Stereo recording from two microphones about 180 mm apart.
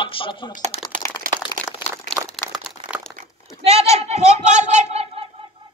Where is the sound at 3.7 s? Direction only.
35° right (ahead or behind).